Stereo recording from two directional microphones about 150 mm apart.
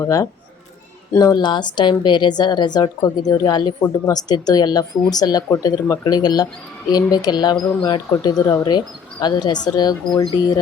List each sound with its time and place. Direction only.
0.0 s a woman's voice: 20° left (ahead or behind)